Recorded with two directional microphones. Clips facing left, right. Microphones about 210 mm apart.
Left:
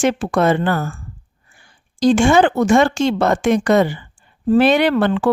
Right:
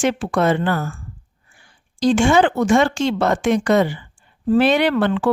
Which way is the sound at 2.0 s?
45° left (ahead or behind).